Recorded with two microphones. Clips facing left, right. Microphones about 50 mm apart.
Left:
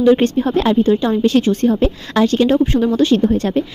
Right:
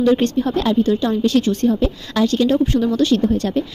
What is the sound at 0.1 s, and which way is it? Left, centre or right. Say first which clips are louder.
Speech: left 3 dB; left.